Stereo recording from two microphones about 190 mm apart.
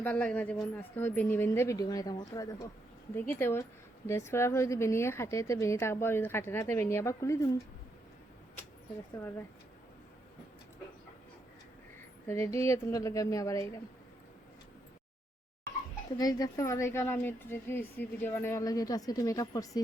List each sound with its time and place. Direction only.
0.0 s a woman's voice: 10° left (ahead or behind)
12.3 s a woman's voice: 15° left (ahead or behind)
16.1 s a woman's voice: 20° left (ahead or behind)